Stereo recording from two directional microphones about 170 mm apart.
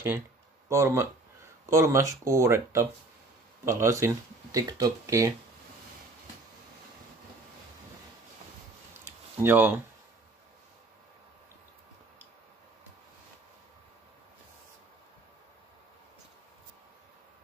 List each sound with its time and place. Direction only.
0.7 s speech: 15° right (ahead or behind)
9.4 s speech: 10° right (ahead or behind)